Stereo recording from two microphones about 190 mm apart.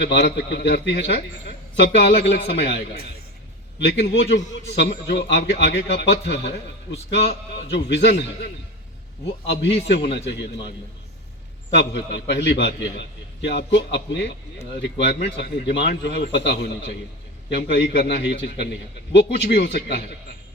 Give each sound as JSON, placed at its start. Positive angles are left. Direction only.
{"t": 0.0, "sound": "a man's voice", "side_deg": 60}
{"t": 9.5, "sound": "a man's voice", "side_deg": 65}
{"t": 11.7, "sound": "a man's voice", "side_deg": 65}